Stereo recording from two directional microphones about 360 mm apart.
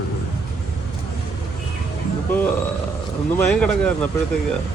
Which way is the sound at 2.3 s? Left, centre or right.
Centre.